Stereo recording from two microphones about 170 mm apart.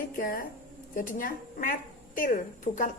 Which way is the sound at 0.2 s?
55° left (ahead or behind).